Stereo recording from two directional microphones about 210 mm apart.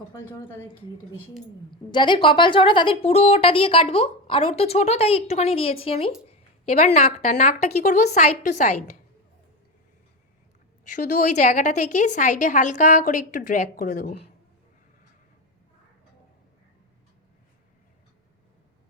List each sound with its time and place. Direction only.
0.1 s a woman's voice: 10° left (ahead or behind)
1.9 s a woman's voice: 20° left (ahead or behind)
10.9 s a woman's voice: 40° left (ahead or behind)